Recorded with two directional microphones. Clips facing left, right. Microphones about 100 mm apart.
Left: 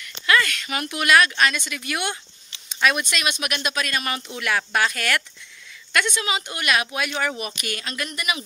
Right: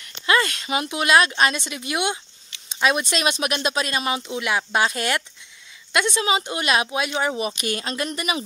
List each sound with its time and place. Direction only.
0.0 s speech: 30° right (ahead or behind)